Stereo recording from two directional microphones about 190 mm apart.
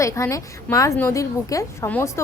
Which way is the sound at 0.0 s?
15° left (ahead or behind).